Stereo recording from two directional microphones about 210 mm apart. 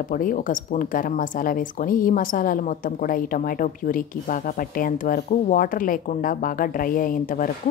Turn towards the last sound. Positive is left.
turn(degrees=40)  # may be behind; listen again after turning